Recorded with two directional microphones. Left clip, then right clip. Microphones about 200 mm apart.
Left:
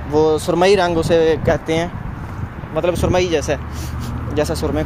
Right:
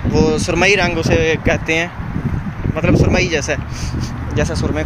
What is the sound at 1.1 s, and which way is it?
Speech, 90° left.